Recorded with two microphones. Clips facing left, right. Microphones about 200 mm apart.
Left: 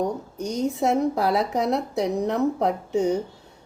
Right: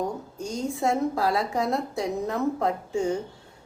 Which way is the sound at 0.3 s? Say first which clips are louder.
Left 6 dB; 20° left (ahead or behind).